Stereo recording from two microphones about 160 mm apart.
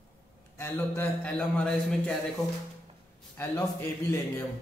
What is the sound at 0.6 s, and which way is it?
A man's voice, 15° left (ahead or behind).